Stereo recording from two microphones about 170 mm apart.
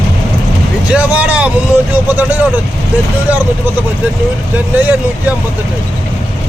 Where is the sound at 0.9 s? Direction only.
10° right (ahead or behind).